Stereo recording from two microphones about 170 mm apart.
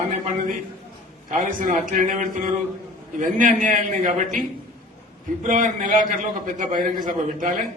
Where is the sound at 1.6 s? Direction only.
55° right (ahead or behind).